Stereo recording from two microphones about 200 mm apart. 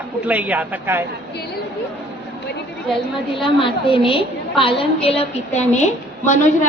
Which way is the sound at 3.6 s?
25° left (ahead or behind).